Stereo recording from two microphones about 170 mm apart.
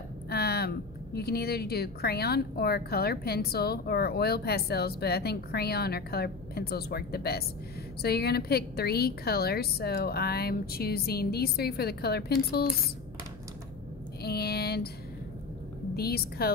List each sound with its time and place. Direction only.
0.3 s a woman's voice: 70° left (ahead or behind)
14.2 s a sound: 65° left (ahead or behind)
16.0 s a woman's voice: 65° left (ahead or behind)